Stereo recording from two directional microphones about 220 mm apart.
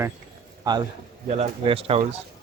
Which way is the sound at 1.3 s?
25° right (ahead or behind).